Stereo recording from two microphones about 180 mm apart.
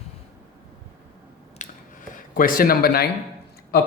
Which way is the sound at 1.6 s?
45° left (ahead or behind).